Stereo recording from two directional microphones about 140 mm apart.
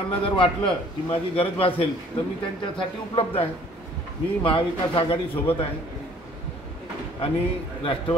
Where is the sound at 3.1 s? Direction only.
40° left (ahead or behind).